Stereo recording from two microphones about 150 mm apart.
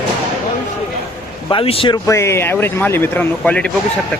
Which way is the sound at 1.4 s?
35° left (ahead or behind).